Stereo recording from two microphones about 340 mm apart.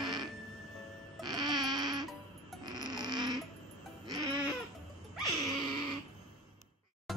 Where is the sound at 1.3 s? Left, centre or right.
Centre.